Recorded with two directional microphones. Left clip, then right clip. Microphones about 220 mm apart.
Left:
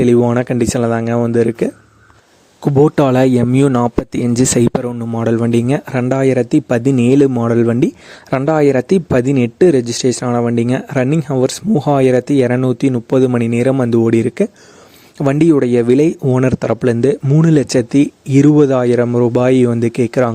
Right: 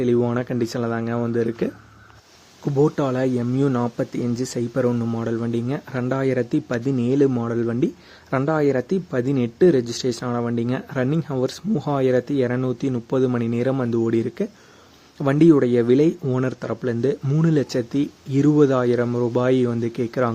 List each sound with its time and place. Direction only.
0.0 s speech: 40° left (ahead or behind)